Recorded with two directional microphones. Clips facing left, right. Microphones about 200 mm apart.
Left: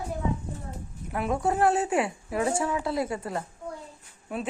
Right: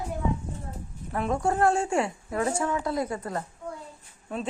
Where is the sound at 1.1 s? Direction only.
5° left (ahead or behind).